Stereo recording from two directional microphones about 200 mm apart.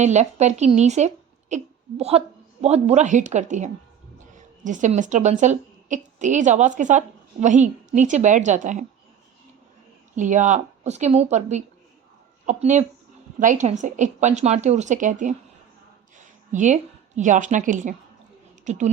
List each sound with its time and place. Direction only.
0.0 s a woman's voice: 35° right (ahead or behind)
10.2 s a woman's voice: 40° right (ahead or behind)
16.5 s a woman's voice: 35° right (ahead or behind)